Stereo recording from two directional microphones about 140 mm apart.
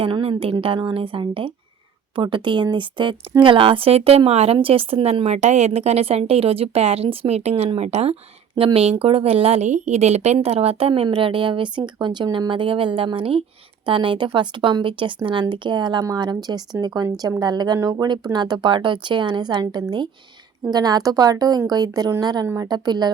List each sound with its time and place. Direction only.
0.0 s a woman's voice: 40° right (ahead or behind)